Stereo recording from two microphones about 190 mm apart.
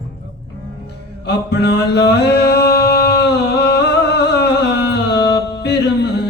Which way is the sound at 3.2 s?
60° left (ahead or behind).